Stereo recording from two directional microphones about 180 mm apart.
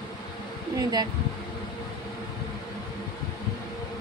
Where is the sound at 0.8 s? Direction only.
20° right (ahead or behind).